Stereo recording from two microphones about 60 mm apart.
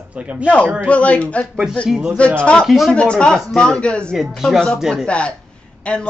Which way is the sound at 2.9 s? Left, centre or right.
Centre.